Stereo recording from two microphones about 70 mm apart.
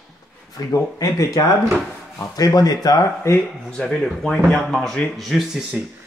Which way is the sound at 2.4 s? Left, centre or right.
Left.